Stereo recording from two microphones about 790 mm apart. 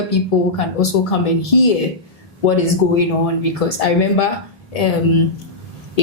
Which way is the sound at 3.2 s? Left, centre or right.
Left.